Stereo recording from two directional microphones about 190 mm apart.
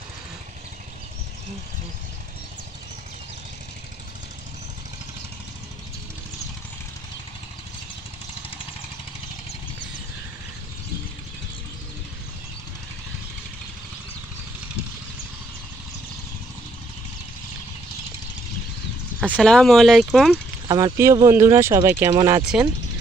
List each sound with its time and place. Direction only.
19.1 s speech: 5° right (ahead or behind)
20.6 s speech: 20° right (ahead or behind)
22.4 s speech: 5° right (ahead or behind)